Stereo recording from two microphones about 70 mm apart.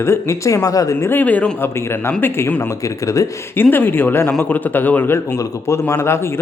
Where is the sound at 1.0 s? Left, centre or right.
Left.